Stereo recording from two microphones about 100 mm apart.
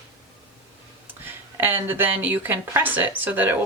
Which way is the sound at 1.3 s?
20° right (ahead or behind).